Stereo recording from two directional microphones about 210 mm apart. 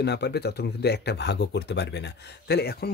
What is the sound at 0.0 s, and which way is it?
Speech, 50° left (ahead or behind).